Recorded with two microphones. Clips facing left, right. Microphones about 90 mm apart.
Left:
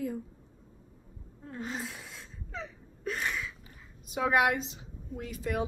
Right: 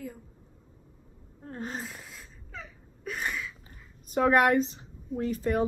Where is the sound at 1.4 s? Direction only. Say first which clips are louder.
Right 1 dB; 40° right (ahead or behind).